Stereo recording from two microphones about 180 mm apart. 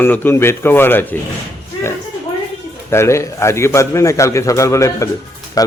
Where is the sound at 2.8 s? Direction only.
15° left (ahead or behind).